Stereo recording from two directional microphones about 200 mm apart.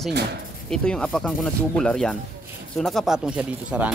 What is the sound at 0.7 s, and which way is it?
Speech, 5° left (ahead or behind).